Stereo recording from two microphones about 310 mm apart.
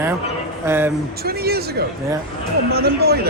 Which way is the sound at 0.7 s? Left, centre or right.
Centre.